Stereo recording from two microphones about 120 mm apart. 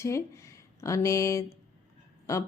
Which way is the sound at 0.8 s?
25° left (ahead or behind).